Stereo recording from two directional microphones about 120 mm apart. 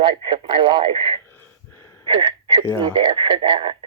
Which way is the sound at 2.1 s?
45° right (ahead or behind).